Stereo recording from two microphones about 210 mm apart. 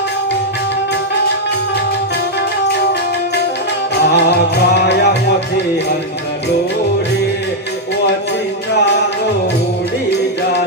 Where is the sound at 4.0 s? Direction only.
55° left (ahead or behind).